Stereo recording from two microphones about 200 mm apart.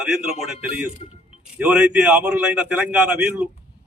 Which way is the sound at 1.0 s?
30° left (ahead or behind).